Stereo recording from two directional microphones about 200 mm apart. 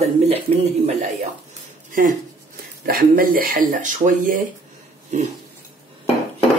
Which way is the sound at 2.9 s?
45° right (ahead or behind).